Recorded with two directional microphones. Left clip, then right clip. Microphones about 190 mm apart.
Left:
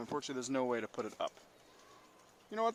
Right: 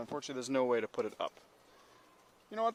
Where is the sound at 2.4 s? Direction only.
30° right (ahead or behind).